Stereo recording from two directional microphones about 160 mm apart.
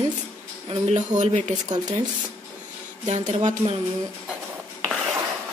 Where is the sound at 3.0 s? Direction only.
45° right (ahead or behind).